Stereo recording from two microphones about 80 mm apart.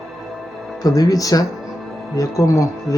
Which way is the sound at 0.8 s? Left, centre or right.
Left.